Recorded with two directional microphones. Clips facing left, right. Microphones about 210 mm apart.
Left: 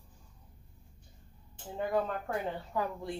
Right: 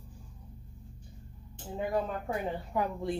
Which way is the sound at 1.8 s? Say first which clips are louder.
Even; 10° right (ahead or behind).